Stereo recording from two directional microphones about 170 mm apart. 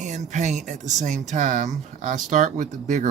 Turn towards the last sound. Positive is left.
turn(degrees=-45)  # may be behind; listen again after turning